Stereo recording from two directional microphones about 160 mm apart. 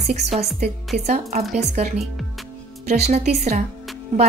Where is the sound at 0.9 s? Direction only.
45° right (ahead or behind).